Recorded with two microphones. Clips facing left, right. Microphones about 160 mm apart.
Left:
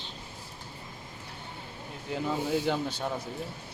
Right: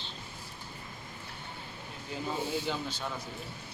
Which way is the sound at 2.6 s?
60° left (ahead or behind).